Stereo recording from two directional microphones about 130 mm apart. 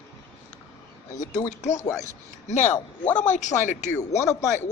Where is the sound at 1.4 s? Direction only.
65° left (ahead or behind).